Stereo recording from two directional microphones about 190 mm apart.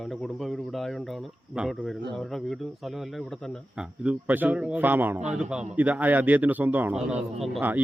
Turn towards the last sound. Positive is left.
turn(degrees=-5)  # may be behind; listen again after turning